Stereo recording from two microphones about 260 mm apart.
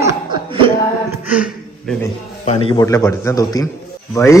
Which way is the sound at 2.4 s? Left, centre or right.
Left.